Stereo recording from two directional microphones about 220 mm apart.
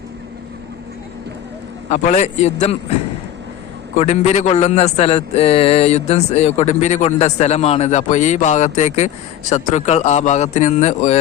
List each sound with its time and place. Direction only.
1.9 s a man's voice: 35° left (ahead or behind)
3.9 s a man's voice: 30° left (ahead or behind)